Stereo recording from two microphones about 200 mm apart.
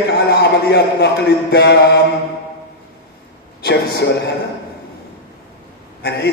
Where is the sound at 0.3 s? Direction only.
55° left (ahead or behind).